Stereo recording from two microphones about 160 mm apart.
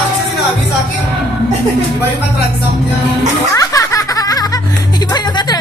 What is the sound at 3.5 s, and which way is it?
Music, 20° left (ahead or behind).